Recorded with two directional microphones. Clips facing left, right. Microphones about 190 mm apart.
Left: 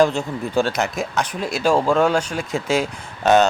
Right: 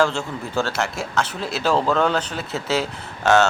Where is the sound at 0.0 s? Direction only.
15° left (ahead or behind).